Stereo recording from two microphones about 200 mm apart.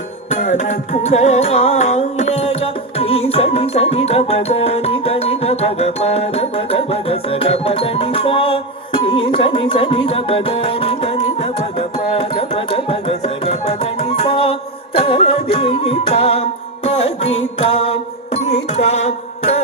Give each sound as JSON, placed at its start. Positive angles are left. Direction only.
{"t": 0.3, "sound": "music", "side_deg": 35}
{"t": 17.6, "sound": "mantra", "side_deg": 30}
{"t": 18.4, "sound": "music", "side_deg": 35}